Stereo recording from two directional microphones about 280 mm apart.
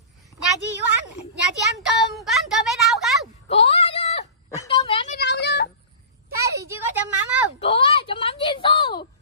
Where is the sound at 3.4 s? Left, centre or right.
Left.